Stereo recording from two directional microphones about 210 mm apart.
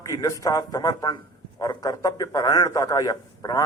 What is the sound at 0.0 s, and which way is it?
A man's voice, 15° left (ahead or behind).